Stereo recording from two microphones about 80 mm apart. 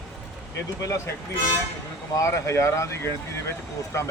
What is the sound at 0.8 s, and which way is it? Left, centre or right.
Speech, left.